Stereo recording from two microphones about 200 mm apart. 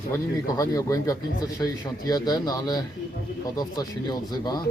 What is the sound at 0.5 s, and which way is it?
A man's voice, 20° left (ahead or behind).